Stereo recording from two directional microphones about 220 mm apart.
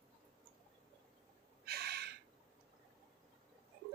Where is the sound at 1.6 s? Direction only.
45° right (ahead or behind).